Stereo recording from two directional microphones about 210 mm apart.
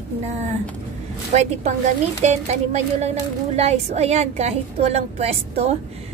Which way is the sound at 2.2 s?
30° right (ahead or behind).